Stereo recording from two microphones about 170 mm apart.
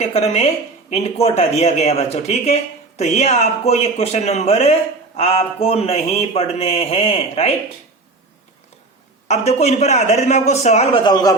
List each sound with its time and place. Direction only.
0.1 s speech: 35° left (ahead or behind)
9.2 s speech: 40° left (ahead or behind)
11.0 s a man's voice: 25° left (ahead or behind)